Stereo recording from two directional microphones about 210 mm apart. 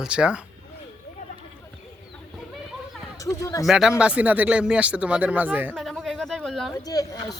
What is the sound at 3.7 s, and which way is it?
Speech, 5° right (ahead or behind).